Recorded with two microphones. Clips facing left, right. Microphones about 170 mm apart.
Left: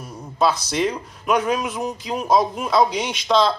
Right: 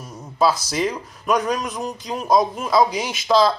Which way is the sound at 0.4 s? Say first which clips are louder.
Even; 5° right (ahead or behind).